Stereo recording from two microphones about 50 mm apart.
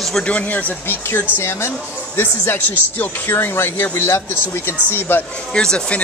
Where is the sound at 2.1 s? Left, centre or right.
Left.